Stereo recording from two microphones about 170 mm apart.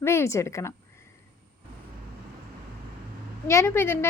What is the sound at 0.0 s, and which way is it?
Speech, 15° left (ahead or behind).